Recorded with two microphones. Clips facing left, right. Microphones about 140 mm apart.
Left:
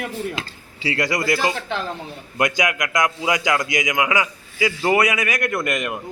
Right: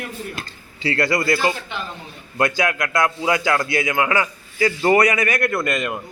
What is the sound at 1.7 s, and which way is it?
Speech, 90° left.